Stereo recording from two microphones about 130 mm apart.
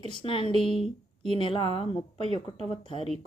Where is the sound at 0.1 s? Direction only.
45° left (ahead or behind).